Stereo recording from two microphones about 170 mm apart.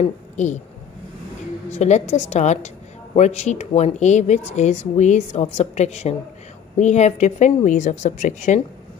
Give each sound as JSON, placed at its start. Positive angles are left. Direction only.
{"t": 1.7, "sound": "speech", "side_deg": 40}